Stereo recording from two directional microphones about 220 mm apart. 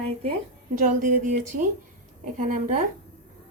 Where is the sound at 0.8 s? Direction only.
35° right (ahead or behind).